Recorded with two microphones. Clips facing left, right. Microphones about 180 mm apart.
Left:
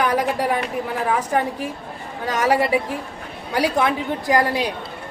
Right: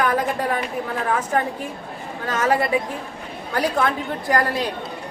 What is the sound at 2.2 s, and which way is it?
Speech, 15° left (ahead or behind).